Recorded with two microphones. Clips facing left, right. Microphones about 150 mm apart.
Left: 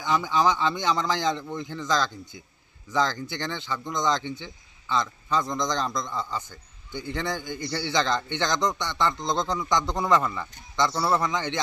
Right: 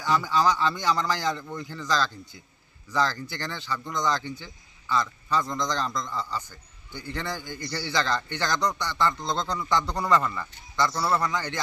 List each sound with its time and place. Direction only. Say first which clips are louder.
0.0 s speech: even; 20° left (ahead or behind)